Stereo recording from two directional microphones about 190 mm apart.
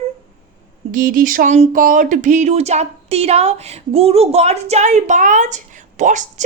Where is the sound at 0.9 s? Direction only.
45° right (ahead or behind).